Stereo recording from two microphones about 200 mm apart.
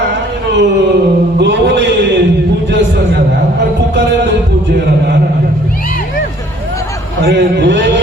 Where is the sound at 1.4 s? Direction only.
60° right (ahead or behind).